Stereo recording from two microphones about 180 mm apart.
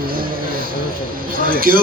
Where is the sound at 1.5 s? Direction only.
55° right (ahead or behind).